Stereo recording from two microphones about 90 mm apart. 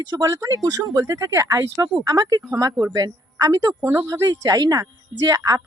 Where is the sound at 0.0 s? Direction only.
45° right (ahead or behind).